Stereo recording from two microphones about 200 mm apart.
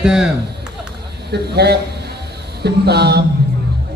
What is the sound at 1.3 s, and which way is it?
Speech, 55° right (ahead or behind).